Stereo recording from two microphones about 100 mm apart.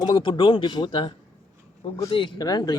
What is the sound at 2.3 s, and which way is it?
Speech, 40° left (ahead or behind).